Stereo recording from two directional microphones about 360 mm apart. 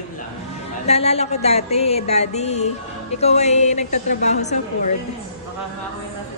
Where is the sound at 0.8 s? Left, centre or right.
Centre.